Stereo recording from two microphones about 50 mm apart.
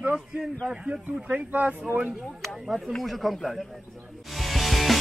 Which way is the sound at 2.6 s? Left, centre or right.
Centre.